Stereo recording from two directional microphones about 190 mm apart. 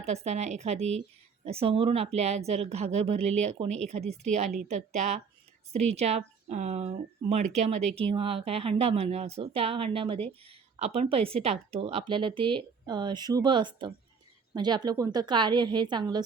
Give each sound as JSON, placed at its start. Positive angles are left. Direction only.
{"t": 0.0, "sound": "a woman's voice", "side_deg": -35}